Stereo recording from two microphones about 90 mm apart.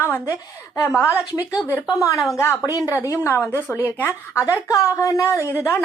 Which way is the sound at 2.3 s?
30° left (ahead or behind).